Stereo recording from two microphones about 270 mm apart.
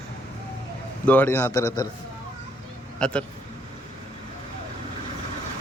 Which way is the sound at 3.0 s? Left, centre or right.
Centre.